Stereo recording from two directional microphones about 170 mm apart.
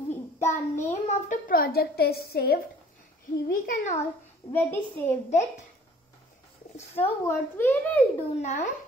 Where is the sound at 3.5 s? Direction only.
55° left (ahead or behind).